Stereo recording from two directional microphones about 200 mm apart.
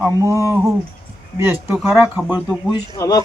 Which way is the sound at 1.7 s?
10° right (ahead or behind).